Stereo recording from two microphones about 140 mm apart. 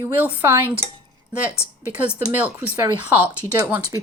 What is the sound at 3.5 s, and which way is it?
Speech, 25° right (ahead or behind).